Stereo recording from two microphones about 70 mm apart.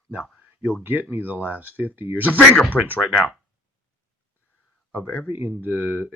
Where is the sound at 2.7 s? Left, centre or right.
Centre.